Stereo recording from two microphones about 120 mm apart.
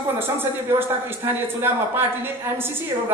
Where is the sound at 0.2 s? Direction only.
20° right (ahead or behind).